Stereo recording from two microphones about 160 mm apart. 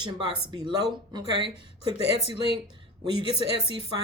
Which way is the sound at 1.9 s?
35° left (ahead or behind).